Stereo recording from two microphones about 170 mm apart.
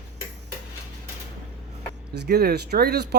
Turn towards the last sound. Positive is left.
turn(degrees=-70)  # may be behind; listen again after turning